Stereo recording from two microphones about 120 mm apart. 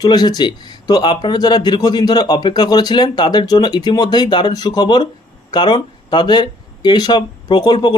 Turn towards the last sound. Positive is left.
turn(degrees=40)  # may be behind; listen again after turning